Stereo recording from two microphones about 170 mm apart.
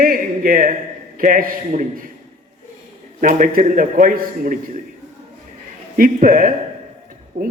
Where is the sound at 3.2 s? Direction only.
50° right (ahead or behind).